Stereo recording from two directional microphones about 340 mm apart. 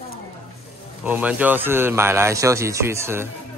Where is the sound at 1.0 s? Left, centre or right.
Centre.